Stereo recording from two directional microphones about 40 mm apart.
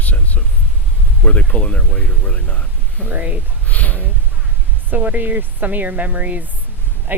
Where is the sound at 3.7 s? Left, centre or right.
Left.